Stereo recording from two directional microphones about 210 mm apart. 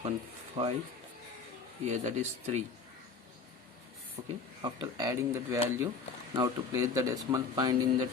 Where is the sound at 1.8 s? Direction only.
35° right (ahead or behind).